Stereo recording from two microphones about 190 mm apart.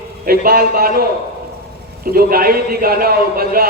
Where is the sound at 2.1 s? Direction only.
50° right (ahead or behind).